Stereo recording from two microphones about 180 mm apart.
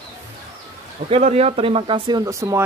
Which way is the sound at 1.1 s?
35° right (ahead or behind).